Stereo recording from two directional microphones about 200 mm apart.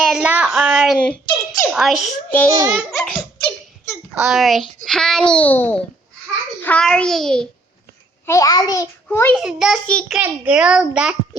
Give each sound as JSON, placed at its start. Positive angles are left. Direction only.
{"t": 0.0, "sound": "speech", "side_deg": -5}
{"t": 2.6, "sound": "a child's voice", "side_deg": -10}
{"t": 2.9, "sound": "speech", "side_deg": 0}
{"t": 8.3, "sound": "a child's voice", "side_deg": 15}
{"t": 9.3, "sound": "speech", "side_deg": 0}
{"t": 10.2, "sound": "speech", "side_deg": -5}